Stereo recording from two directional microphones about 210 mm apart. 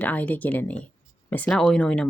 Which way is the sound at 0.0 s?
10° left (ahead or behind).